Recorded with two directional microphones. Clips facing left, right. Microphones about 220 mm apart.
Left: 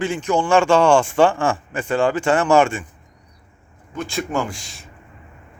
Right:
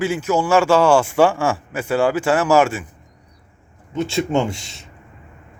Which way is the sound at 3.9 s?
25° right (ahead or behind).